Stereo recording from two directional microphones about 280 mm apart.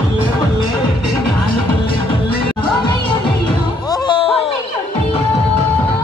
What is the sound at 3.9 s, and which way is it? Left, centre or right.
Music, centre.